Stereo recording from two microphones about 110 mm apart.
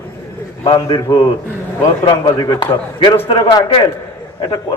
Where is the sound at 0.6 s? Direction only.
55° left (ahead or behind).